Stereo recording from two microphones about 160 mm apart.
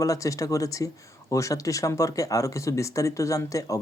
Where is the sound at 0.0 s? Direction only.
20° left (ahead or behind).